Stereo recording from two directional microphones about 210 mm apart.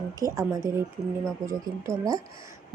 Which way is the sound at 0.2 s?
15° right (ahead or behind).